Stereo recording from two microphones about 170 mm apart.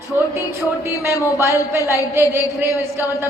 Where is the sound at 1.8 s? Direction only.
20° left (ahead or behind).